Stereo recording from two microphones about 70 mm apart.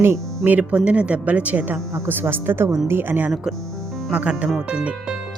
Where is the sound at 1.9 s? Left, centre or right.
Right.